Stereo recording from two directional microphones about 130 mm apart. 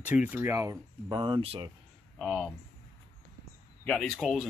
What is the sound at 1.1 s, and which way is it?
Speech, 40° right (ahead or behind).